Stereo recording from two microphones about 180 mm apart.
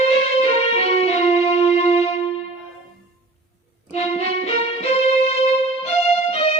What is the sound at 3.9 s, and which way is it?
Music, 35° left (ahead or behind).